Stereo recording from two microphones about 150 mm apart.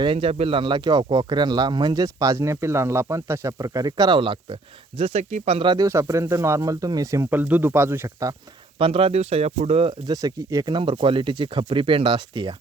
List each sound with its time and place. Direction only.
0.0 s speech: 35° right (ahead or behind); by 8.4 s 20° right (ahead or behind)
8.8 s speech: 40° right (ahead or behind)
10.1 s speech: 25° right (ahead or behind)